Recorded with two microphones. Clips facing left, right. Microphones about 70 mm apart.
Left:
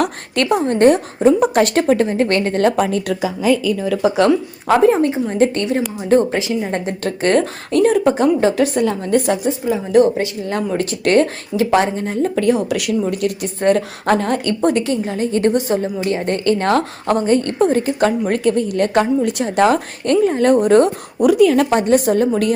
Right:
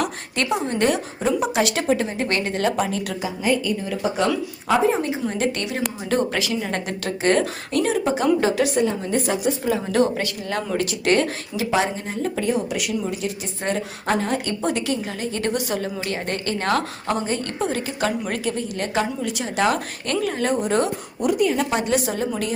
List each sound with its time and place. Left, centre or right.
0.0 s a woman's voice: left
3.8 s a woman's voice: left
4.9 s a woman's voice: left
7.0 s a woman's voice: left
8.8 s a woman's voice: left
9.5 s a woman's voice: centre
11.0 s a woman's voice: left
12.4 s a woman's voice: left
13.1 s a woman's voice: left
18.3 s a woman's voice: left
21.2 s a woman's voice: left
21.7 s a woman's voice: left